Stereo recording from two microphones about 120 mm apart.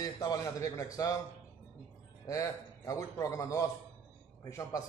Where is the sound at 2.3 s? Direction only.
25° left (ahead or behind).